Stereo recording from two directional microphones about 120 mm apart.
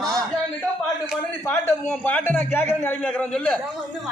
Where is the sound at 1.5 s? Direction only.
15° left (ahead or behind).